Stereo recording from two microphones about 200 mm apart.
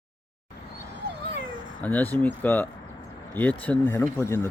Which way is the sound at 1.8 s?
10° left (ahead or behind).